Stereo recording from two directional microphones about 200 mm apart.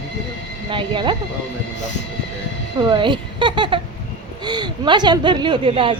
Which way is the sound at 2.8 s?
20° right (ahead or behind).